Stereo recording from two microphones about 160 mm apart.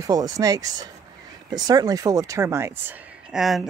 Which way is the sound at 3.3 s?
Centre (ahead or behind).